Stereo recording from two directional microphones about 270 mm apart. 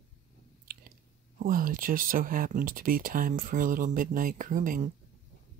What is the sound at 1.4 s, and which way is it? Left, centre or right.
Speech, right.